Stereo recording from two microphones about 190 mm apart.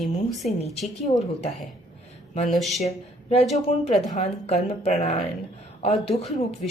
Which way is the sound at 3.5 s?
35° left (ahead or behind).